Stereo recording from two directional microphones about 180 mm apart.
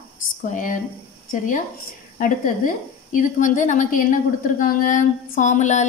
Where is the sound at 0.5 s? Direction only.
45° left (ahead or behind).